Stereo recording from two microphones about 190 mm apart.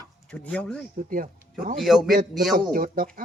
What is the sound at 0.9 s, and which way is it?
Speech, 45° right (ahead or behind).